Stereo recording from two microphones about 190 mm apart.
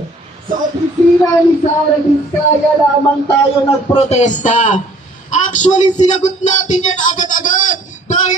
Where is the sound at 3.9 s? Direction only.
35° left (ahead or behind).